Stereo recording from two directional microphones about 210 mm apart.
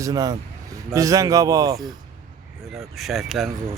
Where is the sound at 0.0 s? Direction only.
15° right (ahead or behind).